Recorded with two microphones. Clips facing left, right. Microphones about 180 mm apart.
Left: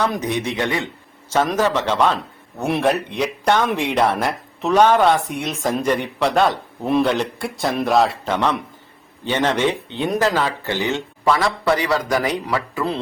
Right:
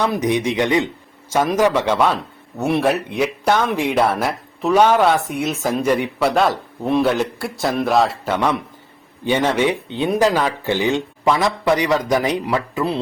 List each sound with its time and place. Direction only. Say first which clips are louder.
0.0 s speech: right 3 dB; 15° right (ahead or behind)